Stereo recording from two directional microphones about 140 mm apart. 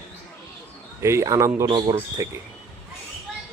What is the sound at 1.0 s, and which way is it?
Speech, 20° right (ahead or behind).